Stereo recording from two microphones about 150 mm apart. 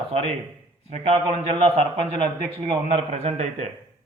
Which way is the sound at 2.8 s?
45° right (ahead or behind).